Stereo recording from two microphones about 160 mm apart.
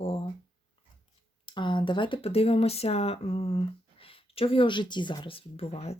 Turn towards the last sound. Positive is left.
turn(degrees=40)  # may be behind; listen again after turning